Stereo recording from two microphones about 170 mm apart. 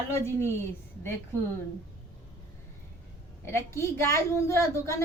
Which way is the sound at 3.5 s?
15° left (ahead or behind).